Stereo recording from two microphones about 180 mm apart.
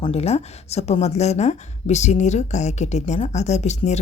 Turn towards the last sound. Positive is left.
turn(degrees=40)  # may be behind; listen again after turning